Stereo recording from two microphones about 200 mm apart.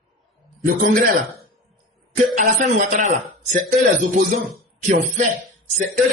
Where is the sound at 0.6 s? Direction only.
45° right (ahead or behind).